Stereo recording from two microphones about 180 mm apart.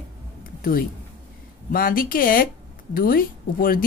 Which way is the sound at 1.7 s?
50° left (ahead or behind).